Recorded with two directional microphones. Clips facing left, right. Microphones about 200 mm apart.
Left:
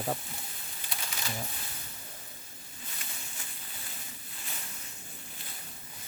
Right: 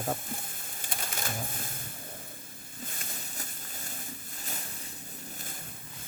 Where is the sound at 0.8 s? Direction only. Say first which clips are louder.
Right 3 dB; 50° right (ahead or behind).